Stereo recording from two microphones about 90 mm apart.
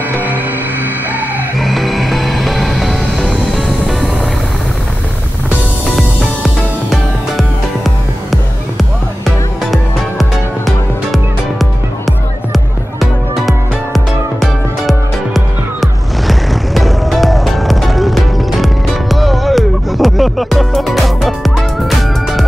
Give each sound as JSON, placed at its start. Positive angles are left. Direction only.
{"t": 0.1, "sound": "music", "side_deg": -20}
{"t": 1.6, "sound": "music", "side_deg": 0}
{"t": 5.9, "sound": "music", "side_deg": 0}
{"t": 12.5, "sound": "music", "side_deg": 0}